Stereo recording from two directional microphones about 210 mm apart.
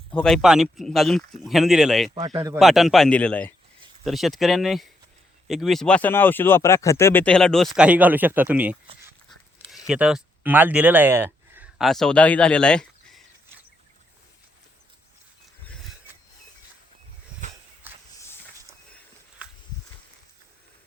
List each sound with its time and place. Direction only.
0.1 s speech: 5° left (ahead or behind)
2.1 s speech: 25° right (ahead or behind)
2.6 s speech: centre (ahead or behind)
9.7 s speech: 5° right (ahead or behind)
17.8 s walk: 10° right (ahead or behind)